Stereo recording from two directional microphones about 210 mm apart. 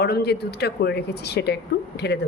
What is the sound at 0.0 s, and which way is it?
A woman's voice, 50° left (ahead or behind).